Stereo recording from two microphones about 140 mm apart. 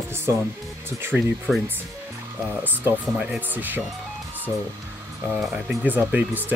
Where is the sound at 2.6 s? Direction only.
15° right (ahead or behind).